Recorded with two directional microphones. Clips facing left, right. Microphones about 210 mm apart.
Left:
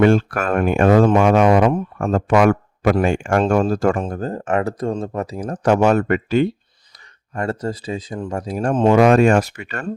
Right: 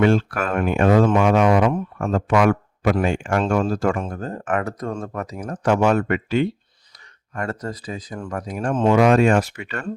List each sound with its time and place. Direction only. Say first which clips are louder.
0.0 s speech: left 3 dB; 50° left (ahead or behind)
7.3 s speech: left 4 dB; 30° left (ahead or behind)